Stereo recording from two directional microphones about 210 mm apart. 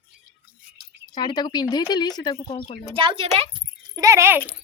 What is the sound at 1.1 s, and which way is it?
Speech, 20° left (ahead or behind).